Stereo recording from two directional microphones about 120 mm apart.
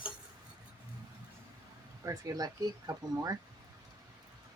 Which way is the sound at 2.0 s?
30° right (ahead or behind).